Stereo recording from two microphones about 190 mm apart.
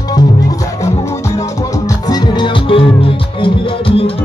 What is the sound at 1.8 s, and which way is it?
Music, 20° left (ahead or behind).